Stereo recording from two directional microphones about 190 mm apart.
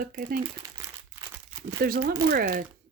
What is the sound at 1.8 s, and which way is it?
Speech, 50° right (ahead or behind).